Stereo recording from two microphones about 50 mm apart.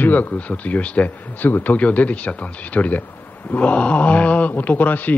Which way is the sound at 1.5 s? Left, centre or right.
Left.